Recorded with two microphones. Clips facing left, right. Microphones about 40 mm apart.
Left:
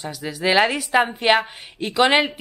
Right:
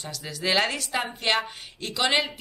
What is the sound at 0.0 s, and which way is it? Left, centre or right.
A woman's voice, centre.